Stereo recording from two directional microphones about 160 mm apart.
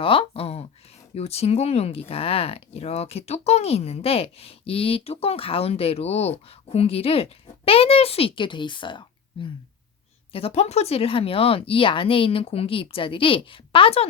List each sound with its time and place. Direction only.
0.0 s speech: 35° left (ahead or behind)